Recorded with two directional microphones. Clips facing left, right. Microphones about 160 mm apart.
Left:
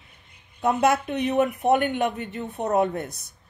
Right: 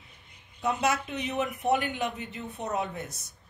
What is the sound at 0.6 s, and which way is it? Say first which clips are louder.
A man's voice: left 7 dB; 55° left (ahead or behind).